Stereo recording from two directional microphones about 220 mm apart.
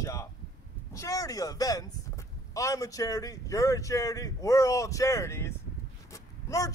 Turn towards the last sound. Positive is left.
turn(degrees=15)  # may be behind; listen again after turning